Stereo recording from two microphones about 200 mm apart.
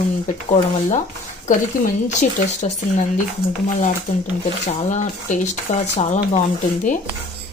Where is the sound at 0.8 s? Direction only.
35° left (ahead or behind).